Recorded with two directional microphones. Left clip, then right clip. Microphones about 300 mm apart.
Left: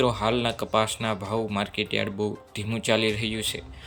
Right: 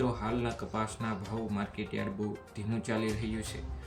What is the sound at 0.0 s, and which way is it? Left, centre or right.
Speech, centre.